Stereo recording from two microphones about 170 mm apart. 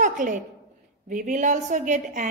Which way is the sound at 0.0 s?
50° right (ahead or behind).